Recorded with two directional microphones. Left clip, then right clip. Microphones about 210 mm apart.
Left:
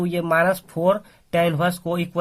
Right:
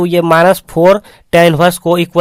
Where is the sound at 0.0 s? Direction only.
45° right (ahead or behind).